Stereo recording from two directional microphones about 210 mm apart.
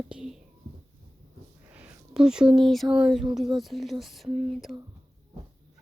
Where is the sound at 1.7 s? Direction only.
5° right (ahead or behind).